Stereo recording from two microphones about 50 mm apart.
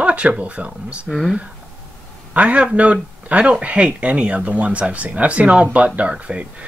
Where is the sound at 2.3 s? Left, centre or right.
Right.